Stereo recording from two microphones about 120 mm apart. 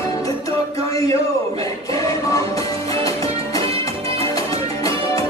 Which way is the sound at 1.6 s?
30° left (ahead or behind).